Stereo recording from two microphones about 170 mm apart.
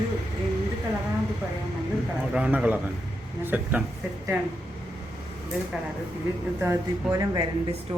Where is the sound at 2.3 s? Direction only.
5° right (ahead or behind).